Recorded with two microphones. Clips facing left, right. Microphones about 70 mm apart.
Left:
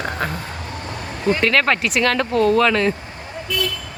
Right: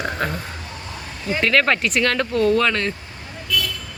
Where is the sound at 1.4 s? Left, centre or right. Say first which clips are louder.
Right 2 dB; centre.